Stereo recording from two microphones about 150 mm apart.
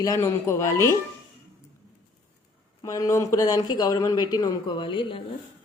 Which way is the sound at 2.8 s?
25° left (ahead or behind).